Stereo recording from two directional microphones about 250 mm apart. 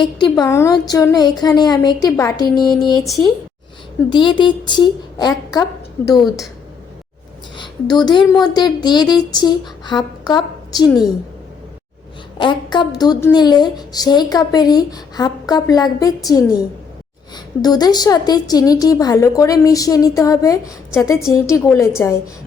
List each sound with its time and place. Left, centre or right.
0.0 s a woman's voice: centre
4.1 s a woman's voice: centre
7.5 s a woman's voice: centre
12.4 s a woman's voice: centre